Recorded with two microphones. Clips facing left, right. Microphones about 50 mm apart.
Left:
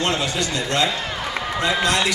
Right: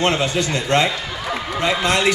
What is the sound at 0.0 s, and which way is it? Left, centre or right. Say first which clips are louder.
A woman's voice: right 3 dB; right.